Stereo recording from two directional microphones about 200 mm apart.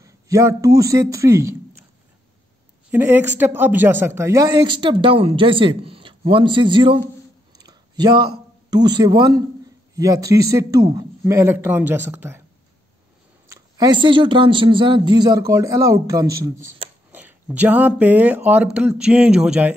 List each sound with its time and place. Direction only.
0.0 s a sound: 15° right (ahead or behind)
0.7 s speech: 15° right (ahead or behind)
2.9 s speech: 10° right (ahead or behind)
7.5 s a sound: 20° right (ahead or behind)
8.6 s speech: 20° right (ahead or behind)
13.5 s speech: 20° right (ahead or behind); by 19.7 s 5° right (ahead or behind)